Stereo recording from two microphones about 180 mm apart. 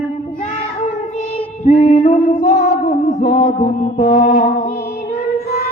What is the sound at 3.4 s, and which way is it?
Music, 50° left (ahead or behind).